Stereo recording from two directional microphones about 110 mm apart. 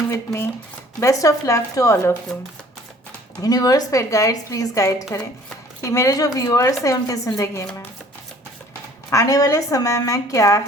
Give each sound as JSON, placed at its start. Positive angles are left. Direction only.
{"t": 0.9, "sound": "speech", "side_deg": 30}
{"t": 3.4, "sound": "a woman's voice", "side_deg": 35}
{"t": 9.0, "sound": "a woman's voice", "side_deg": 30}